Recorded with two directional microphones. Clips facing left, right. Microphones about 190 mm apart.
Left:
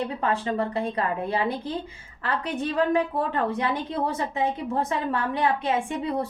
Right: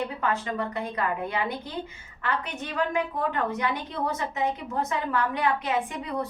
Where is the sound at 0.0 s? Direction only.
30° left (ahead or behind).